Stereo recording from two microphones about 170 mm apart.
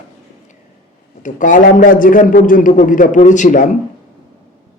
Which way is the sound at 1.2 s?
50° left (ahead or behind).